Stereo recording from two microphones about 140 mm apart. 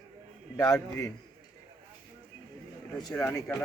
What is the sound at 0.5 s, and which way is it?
Speech, 25° left (ahead or behind).